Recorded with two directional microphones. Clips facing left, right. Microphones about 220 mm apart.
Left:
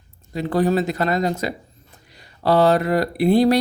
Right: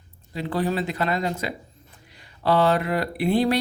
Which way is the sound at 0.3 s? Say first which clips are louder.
Left 6 dB; 45° left (ahead or behind).